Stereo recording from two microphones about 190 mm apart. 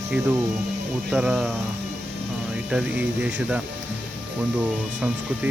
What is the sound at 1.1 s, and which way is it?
Speech, 5° right (ahead or behind).